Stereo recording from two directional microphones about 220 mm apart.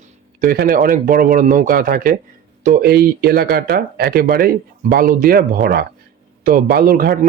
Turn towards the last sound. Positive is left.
turn(degrees=-40)  # may be behind; listen again after turning